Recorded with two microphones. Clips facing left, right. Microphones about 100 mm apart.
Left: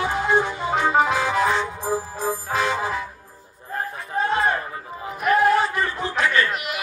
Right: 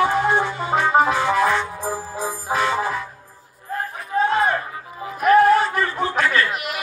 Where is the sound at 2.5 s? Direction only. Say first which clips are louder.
Right 3 dB; 50° right (ahead or behind).